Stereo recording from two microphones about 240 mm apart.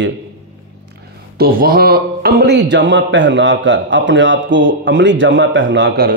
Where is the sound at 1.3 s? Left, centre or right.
Right.